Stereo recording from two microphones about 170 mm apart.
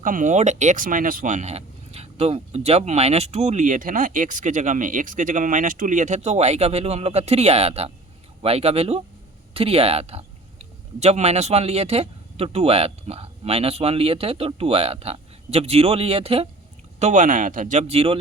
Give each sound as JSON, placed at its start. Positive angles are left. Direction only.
{"t": 0.0, "sound": "speech", "side_deg": -50}